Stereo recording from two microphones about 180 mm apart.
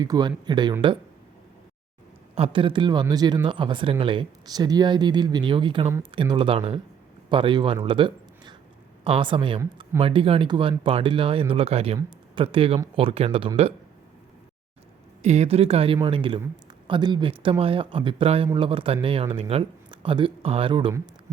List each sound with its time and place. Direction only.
0.0 s speech: 20° right (ahead or behind)
2.3 s speech: 30° right (ahead or behind)
7.9 s a sound: 30° right (ahead or behind)
9.0 s speech: 30° right (ahead or behind)
15.2 s speech: 40° right (ahead or behind)